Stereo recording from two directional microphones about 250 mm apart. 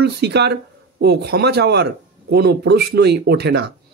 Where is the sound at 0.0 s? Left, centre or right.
Right.